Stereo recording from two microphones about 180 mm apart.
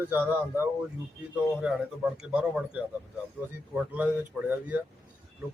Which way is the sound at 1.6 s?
5° right (ahead or behind).